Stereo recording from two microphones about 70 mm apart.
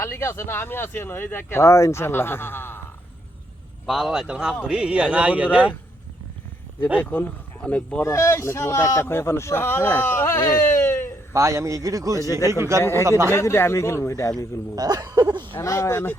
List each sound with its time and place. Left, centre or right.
0.0 s speech: left
3.8 s a man's voice: centre; by 5.5 s right
7.0 s speech: left
8.0 s speech: left
10.4 s a sound: left
11.3 s a man's voice: right
12.2 s speech: left
12.5 s a man's voice: right
12.8 s speech: left
13.1 s a man's voice: right
13.3 s speech: left
14.8 s speech: right
15.6 s speech: left